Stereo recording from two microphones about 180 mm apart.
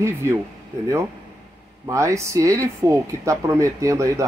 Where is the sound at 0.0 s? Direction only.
15° right (ahead or behind).